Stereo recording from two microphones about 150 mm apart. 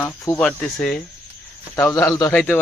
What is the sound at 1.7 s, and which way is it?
Speech, 20° left (ahead or behind).